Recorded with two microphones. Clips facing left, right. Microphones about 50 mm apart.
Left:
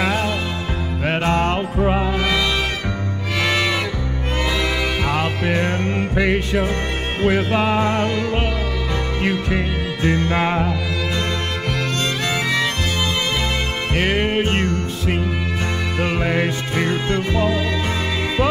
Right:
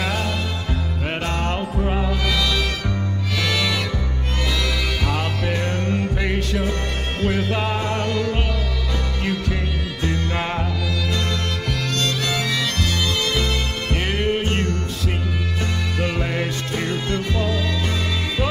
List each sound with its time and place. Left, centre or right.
0.0 s music: left
3.4 s music: left
5.0 s music: left
13.9 s music: left